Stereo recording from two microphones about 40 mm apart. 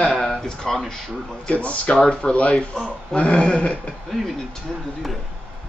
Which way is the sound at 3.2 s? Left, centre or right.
Left.